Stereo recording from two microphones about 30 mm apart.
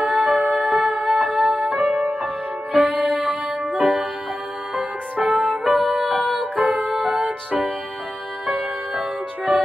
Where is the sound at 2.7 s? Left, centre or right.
Right.